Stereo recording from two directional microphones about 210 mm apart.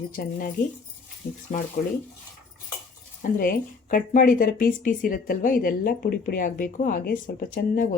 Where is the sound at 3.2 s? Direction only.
40° left (ahead or behind).